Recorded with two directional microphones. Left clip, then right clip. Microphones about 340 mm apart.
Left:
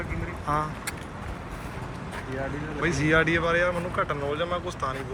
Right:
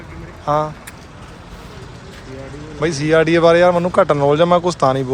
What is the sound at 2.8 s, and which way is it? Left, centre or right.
Speech, centre.